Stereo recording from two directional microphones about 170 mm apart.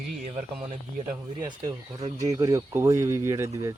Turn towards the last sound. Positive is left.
turn(degrees=-20)  # may be behind; listen again after turning